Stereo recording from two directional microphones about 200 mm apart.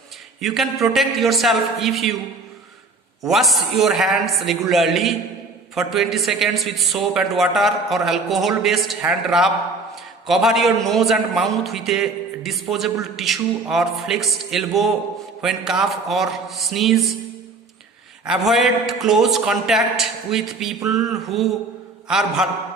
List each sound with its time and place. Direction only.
0.3 s a man's voice: centre (ahead or behind)
3.2 s a man's voice: centre (ahead or behind)
18.3 s a man's voice: centre (ahead or behind)